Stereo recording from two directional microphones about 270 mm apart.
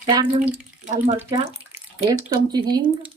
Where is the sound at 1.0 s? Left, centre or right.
Right.